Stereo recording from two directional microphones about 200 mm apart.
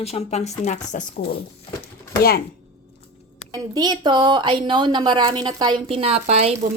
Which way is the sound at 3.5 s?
20° right (ahead or behind).